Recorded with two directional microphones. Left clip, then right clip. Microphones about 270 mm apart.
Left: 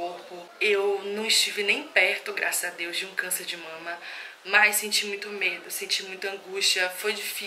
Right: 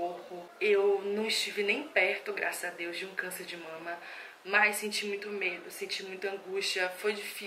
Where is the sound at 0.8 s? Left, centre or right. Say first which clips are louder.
Left 2 dB; right.